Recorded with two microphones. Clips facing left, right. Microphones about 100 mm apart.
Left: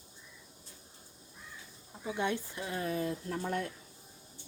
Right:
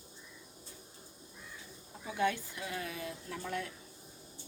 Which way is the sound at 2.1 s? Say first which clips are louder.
Right 2 dB; 25° left (ahead or behind).